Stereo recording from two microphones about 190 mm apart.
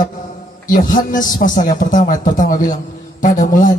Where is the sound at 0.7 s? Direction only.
50° left (ahead or behind).